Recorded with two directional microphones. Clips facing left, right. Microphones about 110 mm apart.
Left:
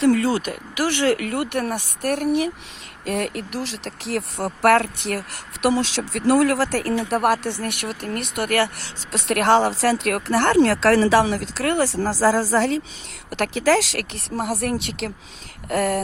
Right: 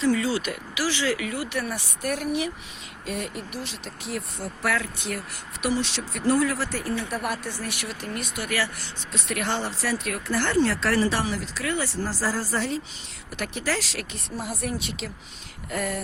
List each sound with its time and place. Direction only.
0.0 s speech: 60° left (ahead or behind)
3.1 s speech: 80° left